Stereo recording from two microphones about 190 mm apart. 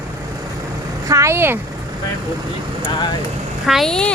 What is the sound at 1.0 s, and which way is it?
Speech, 15° right (ahead or behind).